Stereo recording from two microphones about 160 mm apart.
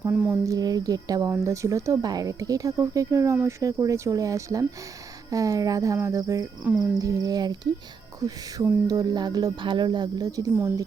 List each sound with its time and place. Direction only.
0.0 s speech: 10° right (ahead or behind)
0.4 s speech: 25° right (ahead or behind)